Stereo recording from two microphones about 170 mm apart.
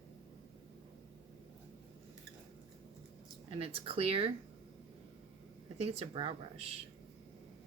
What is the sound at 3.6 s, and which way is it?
Speech, 35° right (ahead or behind).